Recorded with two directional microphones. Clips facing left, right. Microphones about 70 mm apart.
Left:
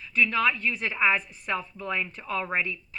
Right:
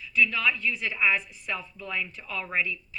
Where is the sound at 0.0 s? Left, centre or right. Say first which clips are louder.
Left 1 dB; left.